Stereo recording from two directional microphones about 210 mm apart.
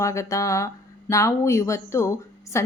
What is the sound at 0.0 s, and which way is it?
Speech, 15° left (ahead or behind).